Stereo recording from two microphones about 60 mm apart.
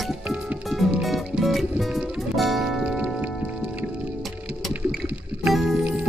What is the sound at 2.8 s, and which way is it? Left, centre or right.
Music, centre.